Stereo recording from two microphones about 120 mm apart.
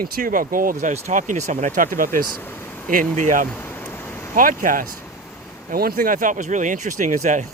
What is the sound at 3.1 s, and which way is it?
Speech, 90° right.